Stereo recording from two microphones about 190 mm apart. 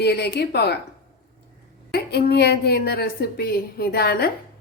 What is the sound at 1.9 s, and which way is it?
A woman's voice, 60° left (ahead or behind).